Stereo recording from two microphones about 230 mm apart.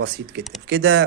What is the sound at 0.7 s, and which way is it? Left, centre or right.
Speech, right.